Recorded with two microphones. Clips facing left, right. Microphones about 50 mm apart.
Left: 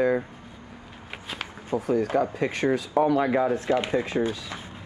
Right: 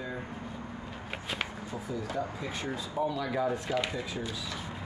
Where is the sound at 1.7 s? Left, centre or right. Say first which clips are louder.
Left 12 dB; left.